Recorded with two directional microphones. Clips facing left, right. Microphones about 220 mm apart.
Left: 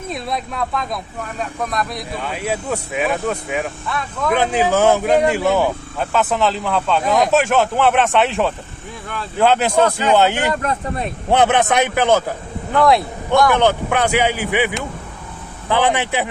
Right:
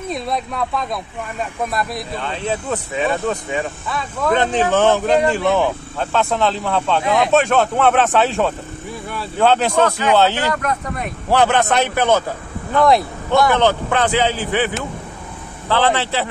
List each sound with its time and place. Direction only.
0.1 s speech: centre (ahead or behind)
2.1 s speech: 10° left (ahead or behind)
9.4 s speech: 10° left (ahead or behind)
10.5 s speech: 30° left (ahead or behind); by 12.2 s 10° left (ahead or behind)
12.8 s speech: centre (ahead or behind)
13.6 s speech: 15° left (ahead or behind)
15.7 s speech: 15° left (ahead or behind)